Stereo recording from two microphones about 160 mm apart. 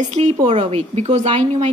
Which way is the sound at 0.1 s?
45° right (ahead or behind).